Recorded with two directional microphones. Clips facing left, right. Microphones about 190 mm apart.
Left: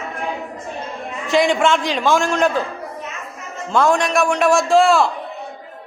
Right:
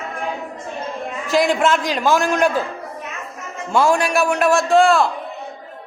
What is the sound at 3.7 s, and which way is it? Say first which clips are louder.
A man's voice: even; 5° right (ahead or behind).